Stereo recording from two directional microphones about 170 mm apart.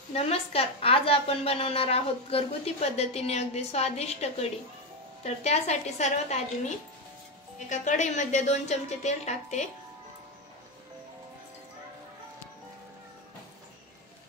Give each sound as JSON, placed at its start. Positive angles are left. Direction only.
{"t": 0.1, "sound": "a woman's voice", "side_deg": 35}
{"t": 7.7, "sound": "a woman's voice", "side_deg": 45}